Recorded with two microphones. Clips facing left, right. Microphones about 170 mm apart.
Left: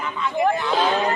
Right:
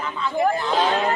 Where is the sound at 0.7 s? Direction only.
20° right (ahead or behind).